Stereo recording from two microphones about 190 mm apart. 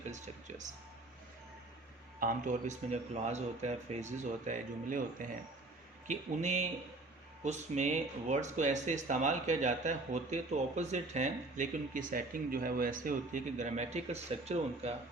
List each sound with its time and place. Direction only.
0.1 s speech: 40° right (ahead or behind)
2.2 s speech: 40° right (ahead or behind)